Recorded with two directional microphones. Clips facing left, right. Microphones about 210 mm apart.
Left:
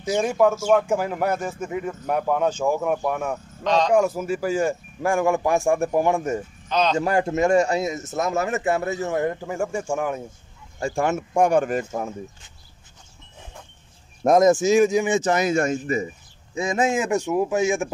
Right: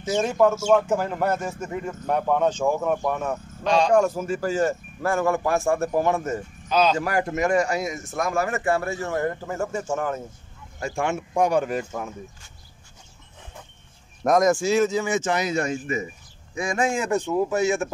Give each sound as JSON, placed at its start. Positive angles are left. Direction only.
{"t": 0.1, "sound": "speech", "side_deg": 10}
{"t": 3.6, "sound": "speech", "side_deg": -10}
{"t": 3.9, "sound": "speech", "side_deg": 10}
{"t": 6.7, "sound": "a man's voice", "side_deg": -5}
{"t": 7.0, "sound": "speech", "side_deg": 25}
{"t": 10.8, "sound": "speech", "side_deg": 40}
{"t": 14.2, "sound": "speech", "side_deg": 25}
{"t": 15.1, "sound": "speech", "side_deg": 40}
{"t": 16.5, "sound": "speech", "side_deg": 20}